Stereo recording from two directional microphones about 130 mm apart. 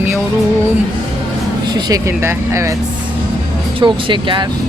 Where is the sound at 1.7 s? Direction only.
30° right (ahead or behind).